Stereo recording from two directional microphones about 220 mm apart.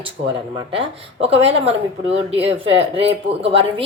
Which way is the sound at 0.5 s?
25° right (ahead or behind).